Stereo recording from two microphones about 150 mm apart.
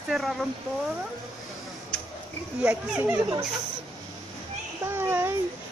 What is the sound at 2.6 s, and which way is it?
Speech, 10° right (ahead or behind).